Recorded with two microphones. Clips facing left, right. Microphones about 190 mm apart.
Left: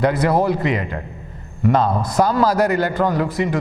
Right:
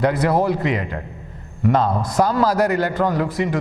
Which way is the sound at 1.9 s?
30° left (ahead or behind).